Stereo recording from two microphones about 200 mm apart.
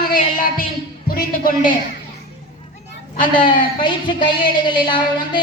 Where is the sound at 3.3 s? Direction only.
25° left (ahead or behind).